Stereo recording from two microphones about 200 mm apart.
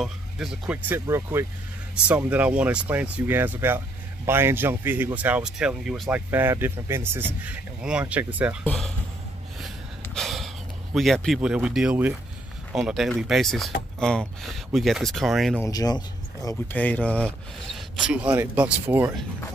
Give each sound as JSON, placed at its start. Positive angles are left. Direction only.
{"t": 0.0, "sound": "speech", "side_deg": -5}
{"t": 10.1, "sound": "speech", "side_deg": 0}
{"t": 15.6, "sound": "speech", "side_deg": 20}
{"t": 16.4, "sound": "speech", "side_deg": 10}